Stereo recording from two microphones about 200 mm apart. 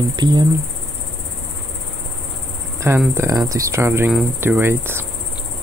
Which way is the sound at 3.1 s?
15° right (ahead or behind).